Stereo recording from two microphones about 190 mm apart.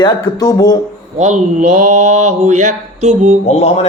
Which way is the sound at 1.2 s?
40° right (ahead or behind).